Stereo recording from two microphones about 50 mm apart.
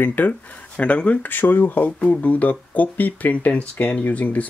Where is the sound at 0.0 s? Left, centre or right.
Left.